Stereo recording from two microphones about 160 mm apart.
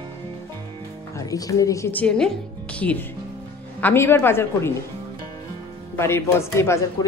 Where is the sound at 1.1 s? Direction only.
20° left (ahead or behind).